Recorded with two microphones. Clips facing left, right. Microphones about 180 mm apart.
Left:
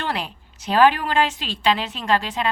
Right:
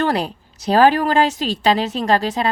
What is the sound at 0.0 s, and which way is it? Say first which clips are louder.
A woman's voice: right 8 dB; 40° right (ahead or behind).